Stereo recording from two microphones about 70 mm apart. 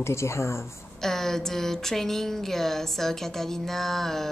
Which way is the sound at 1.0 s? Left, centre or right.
Centre.